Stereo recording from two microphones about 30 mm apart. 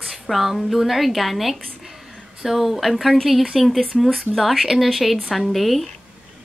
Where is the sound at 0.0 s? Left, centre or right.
Centre.